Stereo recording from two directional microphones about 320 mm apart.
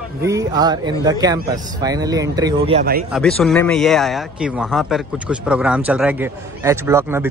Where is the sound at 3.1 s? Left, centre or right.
Centre.